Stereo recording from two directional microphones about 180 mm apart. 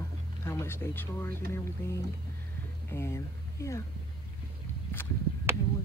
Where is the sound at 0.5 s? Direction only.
15° left (ahead or behind).